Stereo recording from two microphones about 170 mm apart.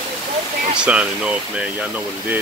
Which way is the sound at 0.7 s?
5° right (ahead or behind).